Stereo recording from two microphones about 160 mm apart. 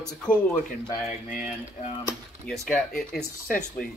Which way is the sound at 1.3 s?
45° left (ahead or behind).